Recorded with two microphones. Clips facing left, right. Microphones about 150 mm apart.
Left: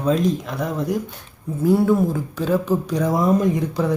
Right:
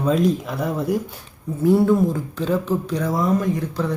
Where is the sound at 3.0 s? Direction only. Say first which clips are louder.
Left 3 dB; 20° left (ahead or behind).